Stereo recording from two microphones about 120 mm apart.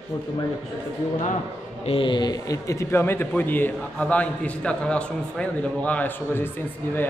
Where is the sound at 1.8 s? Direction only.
45° left (ahead or behind); by 6.5 s 15° left (ahead or behind).